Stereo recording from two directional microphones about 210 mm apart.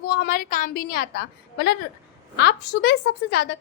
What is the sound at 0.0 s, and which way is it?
A woman's voice, 45° left (ahead or behind).